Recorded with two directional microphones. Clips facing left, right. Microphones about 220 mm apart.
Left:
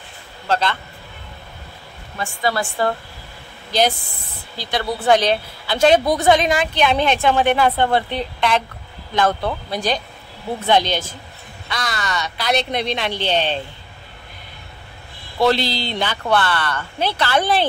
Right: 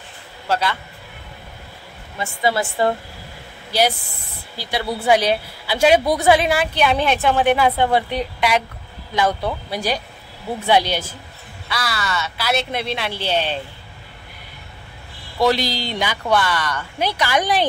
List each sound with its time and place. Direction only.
0.5 s a woman's voice: 10° right (ahead or behind)
2.1 s a woman's voice: 20° right (ahead or behind)
4.6 s a woman's voice: 10° right (ahead or behind)
15.3 s a woman's voice: 10° right (ahead or behind)